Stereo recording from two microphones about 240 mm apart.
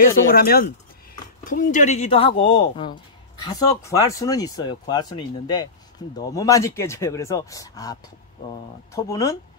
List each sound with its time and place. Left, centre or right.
0.3 s speech: left; by 9.4 s centre